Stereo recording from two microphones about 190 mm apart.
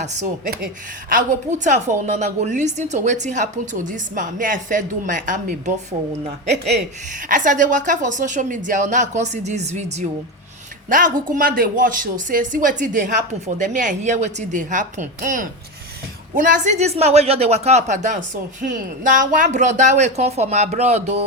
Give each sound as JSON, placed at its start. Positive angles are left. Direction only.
{"t": 0.0, "sound": "a woman's voice", "side_deg": -40}
{"t": 7.3, "sound": "a woman's voice", "side_deg": -45}